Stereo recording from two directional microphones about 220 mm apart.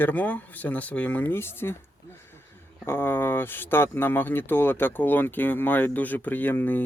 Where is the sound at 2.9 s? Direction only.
10° left (ahead or behind).